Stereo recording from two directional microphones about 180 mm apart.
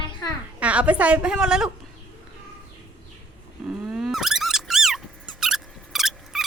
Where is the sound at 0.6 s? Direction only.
5° right (ahead or behind).